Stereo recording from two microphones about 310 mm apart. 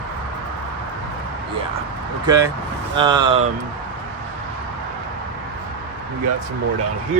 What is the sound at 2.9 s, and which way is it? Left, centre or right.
Speech, centre.